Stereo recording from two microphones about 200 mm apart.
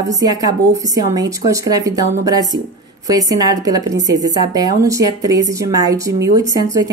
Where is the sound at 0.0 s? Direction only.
20° right (ahead or behind).